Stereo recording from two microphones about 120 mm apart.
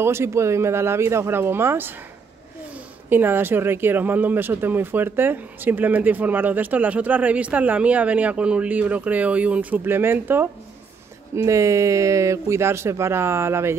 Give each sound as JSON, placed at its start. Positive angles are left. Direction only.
{"t": 0.0, "sound": "speech", "side_deg": -20}
{"t": 3.1, "sound": "speech", "side_deg": -15}